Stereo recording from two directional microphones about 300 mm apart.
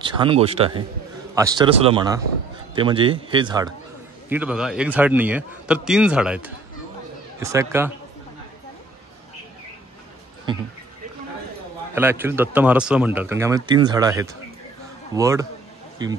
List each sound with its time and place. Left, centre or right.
0.0 s a man's voice: centre
10.5 s speech: centre
11.9 s speech: centre